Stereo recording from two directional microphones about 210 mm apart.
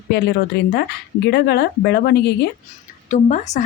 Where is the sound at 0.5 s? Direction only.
45° left (ahead or behind).